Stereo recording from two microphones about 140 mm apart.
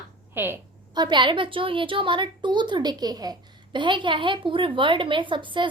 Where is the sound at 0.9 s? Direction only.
35° right (ahead or behind).